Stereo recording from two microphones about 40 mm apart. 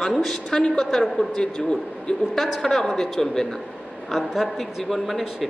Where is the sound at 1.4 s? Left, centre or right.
Left.